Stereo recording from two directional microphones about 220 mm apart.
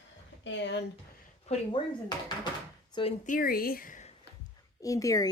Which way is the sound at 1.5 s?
20° left (ahead or behind).